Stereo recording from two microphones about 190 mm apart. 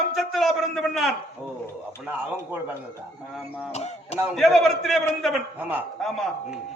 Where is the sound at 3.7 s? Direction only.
35° left (ahead or behind).